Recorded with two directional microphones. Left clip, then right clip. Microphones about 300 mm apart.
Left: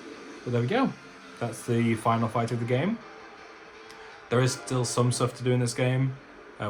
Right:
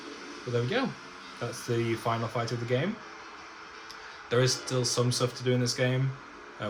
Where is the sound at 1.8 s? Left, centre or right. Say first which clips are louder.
Left 5 dB; left.